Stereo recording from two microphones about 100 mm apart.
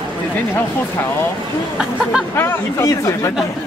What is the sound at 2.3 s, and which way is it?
Speech, 30° left (ahead or behind).